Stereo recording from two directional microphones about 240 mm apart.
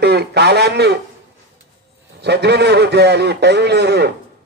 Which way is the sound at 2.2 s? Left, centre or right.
Right.